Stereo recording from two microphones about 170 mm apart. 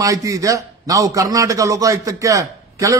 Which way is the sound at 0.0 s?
20° right (ahead or behind).